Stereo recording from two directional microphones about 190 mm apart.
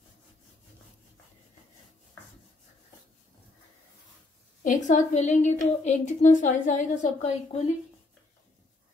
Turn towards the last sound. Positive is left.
turn(degrees=35)  # may be behind; listen again after turning